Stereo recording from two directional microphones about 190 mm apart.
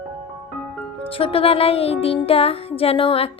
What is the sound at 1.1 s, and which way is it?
Speech, 30° left (ahead or behind).